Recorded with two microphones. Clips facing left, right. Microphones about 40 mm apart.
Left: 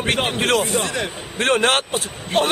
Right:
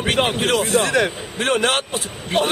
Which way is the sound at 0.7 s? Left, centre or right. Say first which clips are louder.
Right 5 dB; right.